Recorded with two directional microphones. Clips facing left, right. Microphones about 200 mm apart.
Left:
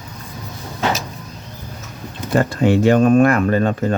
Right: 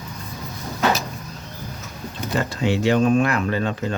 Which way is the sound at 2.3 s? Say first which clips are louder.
Left 7 dB; 50° left (ahead or behind).